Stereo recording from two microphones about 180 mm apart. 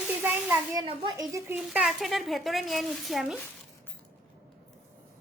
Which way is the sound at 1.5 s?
5° right (ahead or behind).